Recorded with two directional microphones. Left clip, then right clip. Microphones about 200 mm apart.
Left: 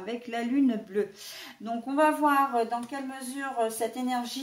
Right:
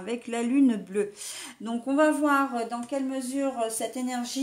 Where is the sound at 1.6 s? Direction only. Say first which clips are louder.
Right 1 dB; 50° right (ahead or behind).